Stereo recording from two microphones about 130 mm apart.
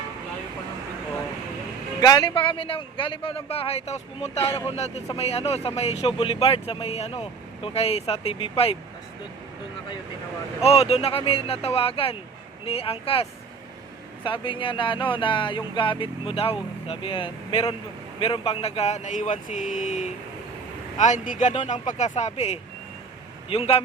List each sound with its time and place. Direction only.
2.0 s speech: 30° left (ahead or behind)
10.6 s speech: 50° left (ahead or behind)
14.3 s speech: 40° left (ahead or behind); by 22.5 s 55° left (ahead or behind)
23.5 s speech: 45° left (ahead or behind)